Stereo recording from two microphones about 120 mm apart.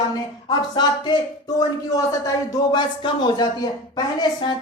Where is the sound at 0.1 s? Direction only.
40° left (ahead or behind).